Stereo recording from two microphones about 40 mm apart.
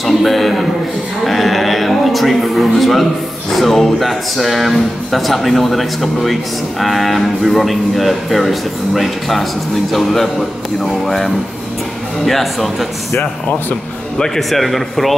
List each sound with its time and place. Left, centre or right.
0.0 s a sound: centre
3.5 s speech: centre
13.2 s speech: left
14.1 s speech: centre
14.5 s speech: centre